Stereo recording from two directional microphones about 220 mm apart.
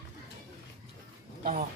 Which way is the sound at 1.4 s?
35° right (ahead or behind).